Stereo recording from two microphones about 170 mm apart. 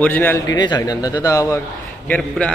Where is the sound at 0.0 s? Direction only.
10° left (ahead or behind).